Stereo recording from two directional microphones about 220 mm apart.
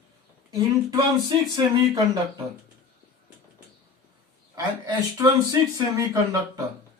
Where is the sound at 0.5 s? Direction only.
20° right (ahead or behind).